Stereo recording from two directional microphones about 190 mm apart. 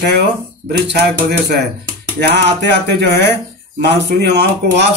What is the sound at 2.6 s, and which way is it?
Speech, 60° right (ahead or behind).